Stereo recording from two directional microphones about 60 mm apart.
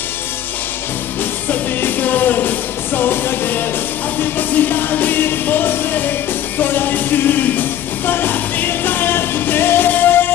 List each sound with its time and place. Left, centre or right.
1.5 s music: left